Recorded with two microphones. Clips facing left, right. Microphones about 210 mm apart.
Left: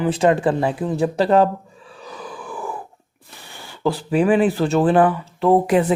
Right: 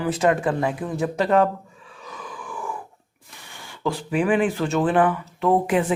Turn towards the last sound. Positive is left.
turn(degrees=35)  # may be behind; listen again after turning